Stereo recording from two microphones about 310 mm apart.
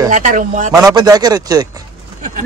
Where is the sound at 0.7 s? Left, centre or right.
Centre.